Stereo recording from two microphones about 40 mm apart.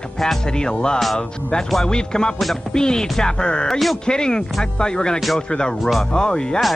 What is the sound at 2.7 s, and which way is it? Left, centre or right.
Music, centre.